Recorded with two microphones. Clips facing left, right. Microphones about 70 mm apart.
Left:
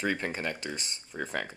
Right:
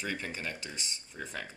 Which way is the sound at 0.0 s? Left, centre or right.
Left.